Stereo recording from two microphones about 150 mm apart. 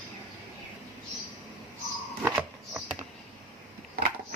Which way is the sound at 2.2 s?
10° right (ahead or behind).